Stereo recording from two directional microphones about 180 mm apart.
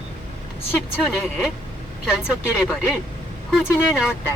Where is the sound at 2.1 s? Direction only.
5° right (ahead or behind).